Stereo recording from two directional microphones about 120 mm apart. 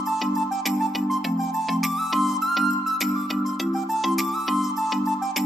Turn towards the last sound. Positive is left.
turn(degrees=0)  # may be behind; listen again after turning